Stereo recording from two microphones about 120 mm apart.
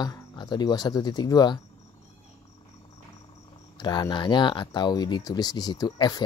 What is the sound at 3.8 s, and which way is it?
Speech, 35° left (ahead or behind).